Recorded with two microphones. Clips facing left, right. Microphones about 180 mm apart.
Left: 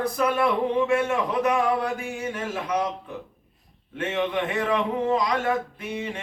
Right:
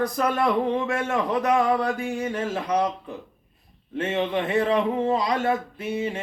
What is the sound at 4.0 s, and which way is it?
A man's voice, 30° right (ahead or behind).